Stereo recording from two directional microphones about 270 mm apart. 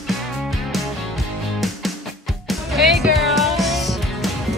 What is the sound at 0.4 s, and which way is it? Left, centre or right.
Music, centre.